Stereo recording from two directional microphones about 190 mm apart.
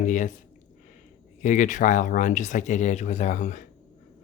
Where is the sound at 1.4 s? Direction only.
40° left (ahead or behind).